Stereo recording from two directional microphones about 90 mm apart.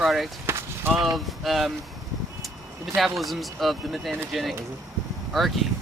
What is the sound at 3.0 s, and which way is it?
Speech, centre (ahead or behind).